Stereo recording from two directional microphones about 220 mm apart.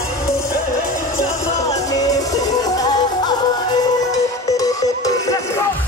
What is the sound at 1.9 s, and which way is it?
Music, 15° left (ahead or behind).